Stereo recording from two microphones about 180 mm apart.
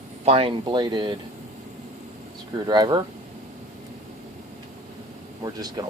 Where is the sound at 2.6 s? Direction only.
25° right (ahead or behind).